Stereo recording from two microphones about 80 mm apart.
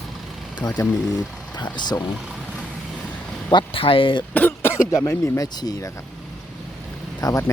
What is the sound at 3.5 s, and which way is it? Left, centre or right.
Speech, left.